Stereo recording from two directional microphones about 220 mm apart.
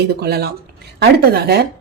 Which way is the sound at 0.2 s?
45° right (ahead or behind).